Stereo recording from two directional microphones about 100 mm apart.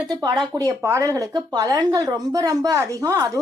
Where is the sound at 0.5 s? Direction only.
30° right (ahead or behind).